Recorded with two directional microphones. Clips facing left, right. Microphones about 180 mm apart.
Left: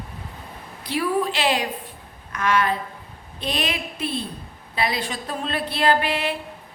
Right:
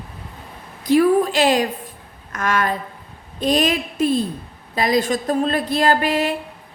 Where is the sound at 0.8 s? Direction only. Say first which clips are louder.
Right 9 dB; 45° right (ahead or behind).